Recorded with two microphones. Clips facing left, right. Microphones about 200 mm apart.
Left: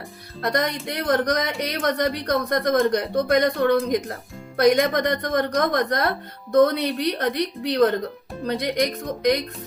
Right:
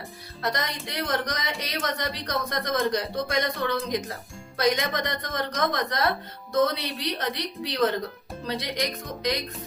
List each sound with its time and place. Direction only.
0.5 s speech: 60° left (ahead or behind)